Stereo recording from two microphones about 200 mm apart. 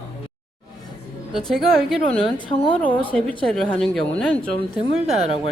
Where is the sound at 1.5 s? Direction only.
Centre (ahead or behind).